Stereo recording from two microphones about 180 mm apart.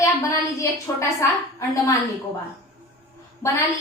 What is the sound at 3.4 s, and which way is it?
Speech, 15° left (ahead or behind).